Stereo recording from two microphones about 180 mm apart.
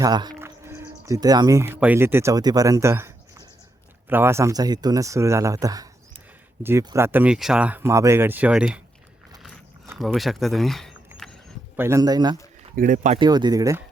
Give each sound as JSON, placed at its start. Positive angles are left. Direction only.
{"t": 0.0, "sound": "speech", "side_deg": -20}
{"t": 10.0, "sound": "speech", "side_deg": 0}
{"t": 11.8, "sound": "speech", "side_deg": -15}
{"t": 12.7, "sound": "speech", "side_deg": -50}
{"t": 13.1, "sound": "speech", "side_deg": -25}